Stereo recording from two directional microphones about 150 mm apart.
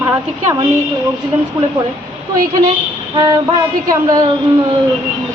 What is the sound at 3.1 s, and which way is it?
Music, 25° right (ahead or behind).